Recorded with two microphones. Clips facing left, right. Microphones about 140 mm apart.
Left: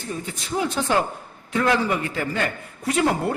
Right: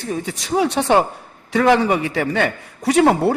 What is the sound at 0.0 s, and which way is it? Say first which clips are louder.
A man's voice: right 6 dB; 70° right (ahead or behind).